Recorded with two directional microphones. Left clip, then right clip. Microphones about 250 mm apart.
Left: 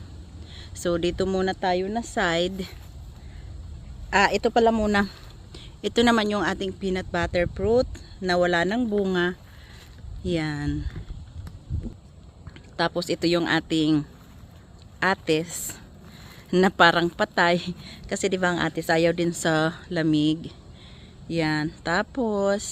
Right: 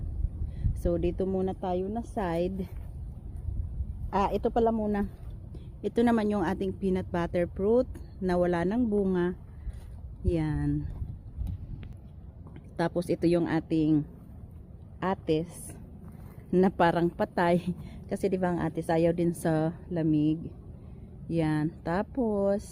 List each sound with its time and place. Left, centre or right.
0.5 s speech: centre
1.6 s a woman's voice: left
1.9 s a woman's voice: left
4.4 s a woman's voice: left
4.8 s speech: left
5.5 s a woman's voice: centre
13.0 s a woman's voice: centre
21.2 s a woman's voice: centre